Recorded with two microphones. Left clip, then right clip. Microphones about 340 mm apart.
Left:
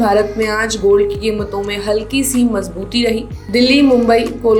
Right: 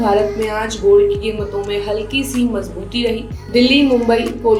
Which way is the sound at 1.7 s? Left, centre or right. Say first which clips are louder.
Left 4 dB; left.